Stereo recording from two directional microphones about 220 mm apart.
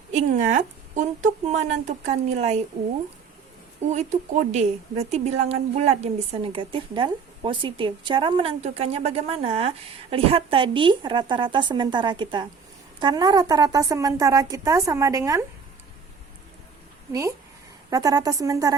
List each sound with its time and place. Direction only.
0.1 s a woman's voice: 30° right (ahead or behind)
3.9 s a woman's voice: 30° right (ahead or behind); by 15.4 s 15° right (ahead or behind)
17.1 s a woman's voice: 15° right (ahead or behind)